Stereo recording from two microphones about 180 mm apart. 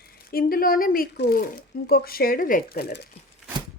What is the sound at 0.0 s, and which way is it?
A woman's voice, 55° left (ahead or behind).